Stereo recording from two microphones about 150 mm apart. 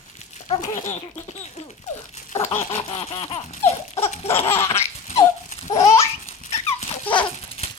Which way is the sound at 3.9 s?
45° left (ahead or behind).